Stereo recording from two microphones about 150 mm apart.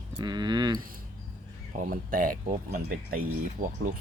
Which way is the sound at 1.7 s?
65° right (ahead or behind).